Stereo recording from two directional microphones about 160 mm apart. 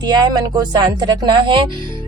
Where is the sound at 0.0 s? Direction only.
25° right (ahead or behind).